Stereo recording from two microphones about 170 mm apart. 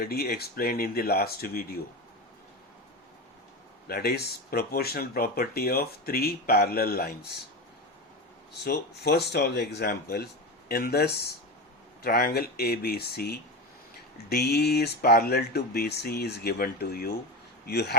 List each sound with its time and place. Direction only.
0.0 s speech: 65° left (ahead or behind)
3.8 s speech: 65° left (ahead or behind)
8.6 s speech: 75° left (ahead or behind)